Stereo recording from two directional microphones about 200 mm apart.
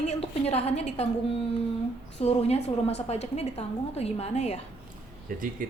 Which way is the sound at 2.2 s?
30° left (ahead or behind).